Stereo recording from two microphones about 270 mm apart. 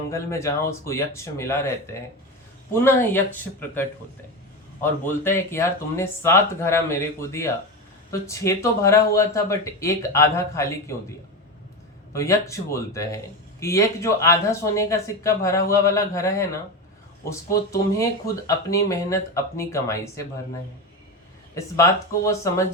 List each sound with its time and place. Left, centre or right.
0.1 s speech: centre
12.1 s speech: centre
21.5 s speech: centre